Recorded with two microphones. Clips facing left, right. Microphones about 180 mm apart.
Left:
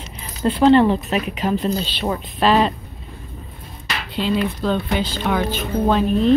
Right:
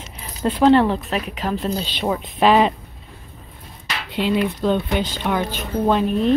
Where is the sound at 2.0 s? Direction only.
10° right (ahead or behind).